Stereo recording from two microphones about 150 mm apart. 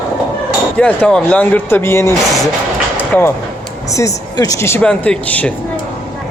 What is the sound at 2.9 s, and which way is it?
Train, 15° left (ahead or behind).